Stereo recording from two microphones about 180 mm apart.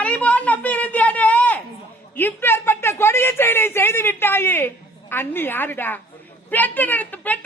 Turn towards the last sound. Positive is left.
turn(degrees=10)  # may be behind; listen again after turning